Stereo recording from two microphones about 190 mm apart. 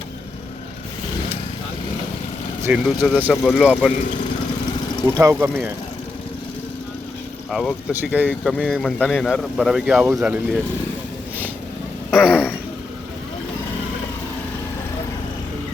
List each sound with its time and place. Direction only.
2.6 s speech: 10° right (ahead or behind)
5.1 s speech: 15° right (ahead or behind)
7.5 s speech: 5° left (ahead or behind)
7.9 s speech: 10° right (ahead or behind)
8.3 s speech: 5° left (ahead or behind)
10.1 s speech: 15° right (ahead or behind)
12.1 s a sound: 5° right (ahead or behind)